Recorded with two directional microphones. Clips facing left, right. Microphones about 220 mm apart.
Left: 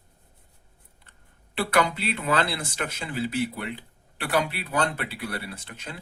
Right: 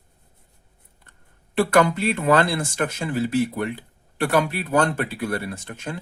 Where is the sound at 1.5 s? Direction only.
50° right (ahead or behind).